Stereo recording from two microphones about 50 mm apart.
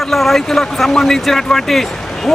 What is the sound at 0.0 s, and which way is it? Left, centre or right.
Speech, centre.